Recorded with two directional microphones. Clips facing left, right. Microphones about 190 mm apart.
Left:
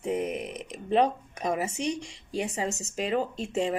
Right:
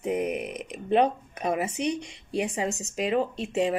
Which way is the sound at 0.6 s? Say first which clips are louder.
Right 1 dB; 30° left (ahead or behind).